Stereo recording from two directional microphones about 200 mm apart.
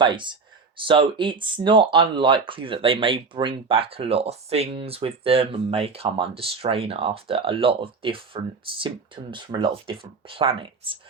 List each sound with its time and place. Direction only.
0.0 s speech: 25° right (ahead or behind)